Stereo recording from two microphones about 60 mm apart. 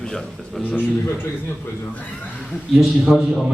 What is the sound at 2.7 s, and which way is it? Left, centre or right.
Speech, centre.